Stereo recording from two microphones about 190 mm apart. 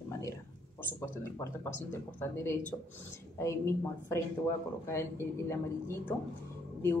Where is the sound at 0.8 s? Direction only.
15° left (ahead or behind).